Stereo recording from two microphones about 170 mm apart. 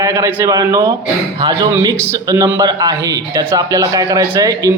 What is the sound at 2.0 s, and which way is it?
A man's voice, 20° right (ahead or behind).